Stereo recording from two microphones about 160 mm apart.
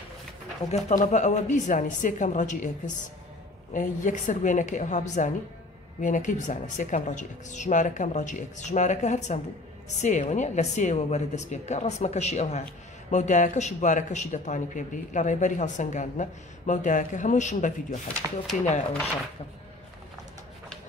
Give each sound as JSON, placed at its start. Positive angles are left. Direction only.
{"t": 0.7, "sound": "a man's voice", "side_deg": 45}
{"t": 3.7, "sound": "a man's voice", "side_deg": 55}
{"t": 18.2, "sound": "speech", "side_deg": -15}